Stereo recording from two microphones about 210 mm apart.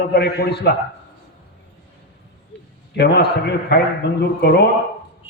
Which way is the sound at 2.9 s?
50° left (ahead or behind).